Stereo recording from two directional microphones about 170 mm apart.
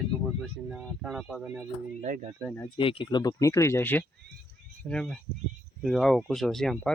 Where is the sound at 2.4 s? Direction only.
10° left (ahead or behind).